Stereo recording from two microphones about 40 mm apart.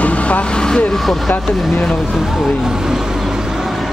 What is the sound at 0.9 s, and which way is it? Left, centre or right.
Speech, centre.